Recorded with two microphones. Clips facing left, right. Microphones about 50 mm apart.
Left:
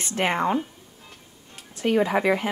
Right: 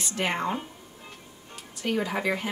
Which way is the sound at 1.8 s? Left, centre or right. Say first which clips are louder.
Left 6 dB; left.